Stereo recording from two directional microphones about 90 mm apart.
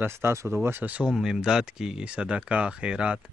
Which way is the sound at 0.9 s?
5° right (ahead or behind).